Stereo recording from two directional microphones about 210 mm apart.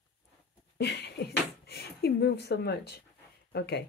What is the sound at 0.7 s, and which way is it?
Beatboxing, 50° left (ahead or behind).